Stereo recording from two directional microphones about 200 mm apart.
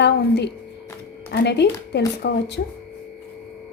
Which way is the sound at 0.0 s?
60° left (ahead or behind).